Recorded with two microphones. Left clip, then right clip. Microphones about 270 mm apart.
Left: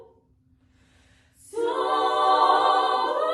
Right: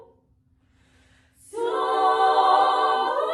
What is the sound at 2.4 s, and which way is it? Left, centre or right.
A capella, centre.